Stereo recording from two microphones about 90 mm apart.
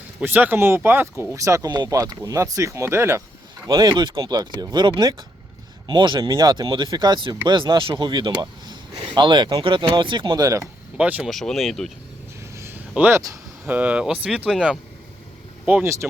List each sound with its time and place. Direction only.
0.2 s speech: 20° right (ahead or behind)
1.2 s speech: 35° right (ahead or behind)
3.7 s speech: 50° right (ahead or behind)
6.7 s speech: 60° right (ahead or behind)
10.3 s speech: 45° right (ahead or behind)
10.9 s speech: 15° right (ahead or behind)
11.3 s speech: centre (ahead or behind)
12.5 s a sound: 30° right (ahead or behind)
13.0 s speech: 25° right (ahead or behind)
15.8 s speech: 30° right (ahead or behind)